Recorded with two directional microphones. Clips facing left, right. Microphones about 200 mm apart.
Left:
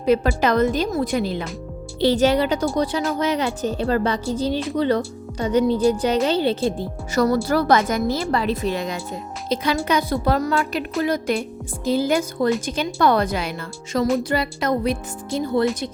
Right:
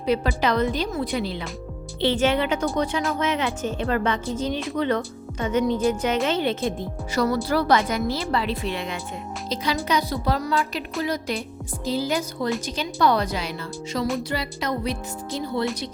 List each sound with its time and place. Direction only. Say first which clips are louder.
0.0 s a woman's voice: left 4 dB; 45° left (ahead or behind)
7.2 s a woman's voice: left 4 dB; 45° left (ahead or behind)
9.5 s a woman's voice: left 4 dB; 55° left (ahead or behind)